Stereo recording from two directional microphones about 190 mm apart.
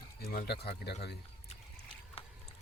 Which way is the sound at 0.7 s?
60° left (ahead or behind).